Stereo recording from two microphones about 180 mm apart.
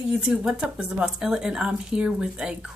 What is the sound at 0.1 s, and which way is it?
Speech, 5° right (ahead or behind).